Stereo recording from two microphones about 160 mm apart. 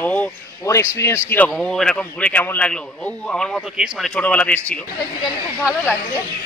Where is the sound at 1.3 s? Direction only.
5° left (ahead or behind).